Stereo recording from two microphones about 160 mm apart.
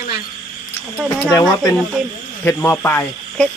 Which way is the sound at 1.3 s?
25° left (ahead or behind).